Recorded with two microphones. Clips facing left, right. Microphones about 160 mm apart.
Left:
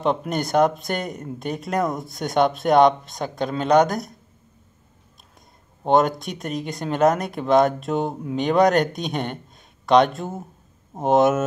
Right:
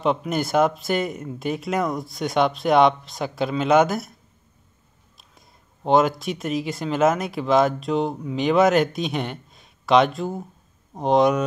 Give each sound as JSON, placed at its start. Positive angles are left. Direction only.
{"t": 0.0, "sound": "speech", "side_deg": 0}
{"t": 5.9, "sound": "speech", "side_deg": 0}